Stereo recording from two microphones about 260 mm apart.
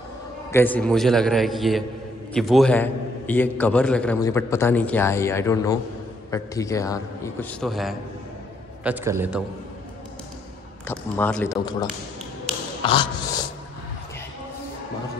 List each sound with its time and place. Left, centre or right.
0.5 s a man's voice: centre
7.6 s a man's voice: centre
10.9 s a man's voice: centre
12.8 s a sound: centre